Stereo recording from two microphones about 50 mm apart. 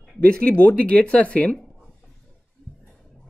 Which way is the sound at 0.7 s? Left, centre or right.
Left.